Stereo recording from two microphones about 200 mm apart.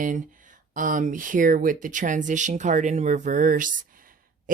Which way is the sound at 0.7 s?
40° right (ahead or behind).